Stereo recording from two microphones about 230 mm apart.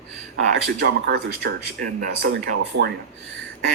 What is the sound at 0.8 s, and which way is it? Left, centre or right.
Speech, right.